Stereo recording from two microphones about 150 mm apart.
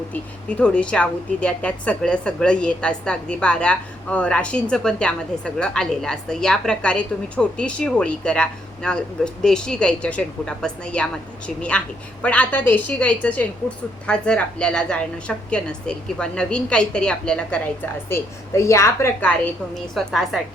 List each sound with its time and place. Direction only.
0.1 s a woman's voice: 10° left (ahead or behind)
18.1 s a woman's voice: 20° left (ahead or behind)
19.7 s a woman's voice: centre (ahead or behind)